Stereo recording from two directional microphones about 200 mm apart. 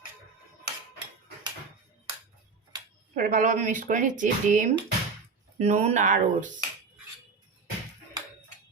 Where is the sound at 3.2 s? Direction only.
40° right (ahead or behind).